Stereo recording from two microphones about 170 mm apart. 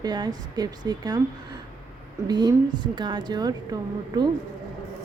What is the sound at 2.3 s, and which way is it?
A woman's voice, 25° right (ahead or behind).